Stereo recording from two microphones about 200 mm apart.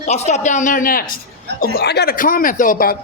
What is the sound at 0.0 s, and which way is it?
A woman's voice, 35° left (ahead or behind).